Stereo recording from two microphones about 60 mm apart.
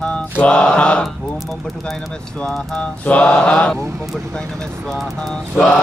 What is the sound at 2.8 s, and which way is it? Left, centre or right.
Mantra, left.